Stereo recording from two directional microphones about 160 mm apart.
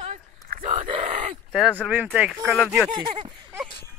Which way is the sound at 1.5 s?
5° left (ahead or behind).